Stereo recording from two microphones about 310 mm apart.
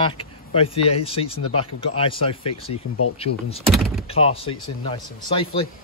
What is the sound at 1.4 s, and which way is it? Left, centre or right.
Speech, left.